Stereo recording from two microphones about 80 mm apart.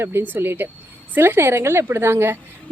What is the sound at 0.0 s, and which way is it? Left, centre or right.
Speech, right.